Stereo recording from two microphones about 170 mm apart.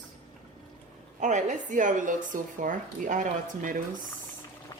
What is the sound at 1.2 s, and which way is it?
Speech, 45° right (ahead or behind).